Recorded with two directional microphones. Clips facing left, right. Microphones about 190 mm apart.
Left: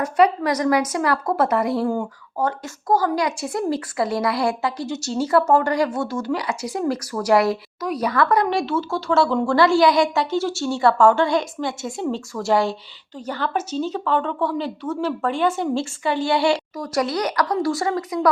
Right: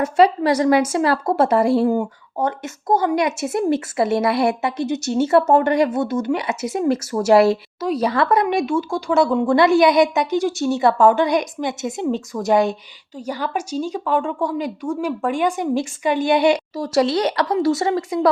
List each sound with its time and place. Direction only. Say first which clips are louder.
0.0 s a woman's voice: right 2 dB; 30° right (ahead or behind)